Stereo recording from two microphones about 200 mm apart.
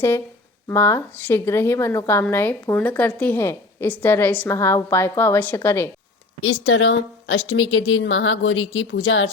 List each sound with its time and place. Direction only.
0.7 s speech: 10° left (ahead or behind)
6.4 s a woman's voice: 80° left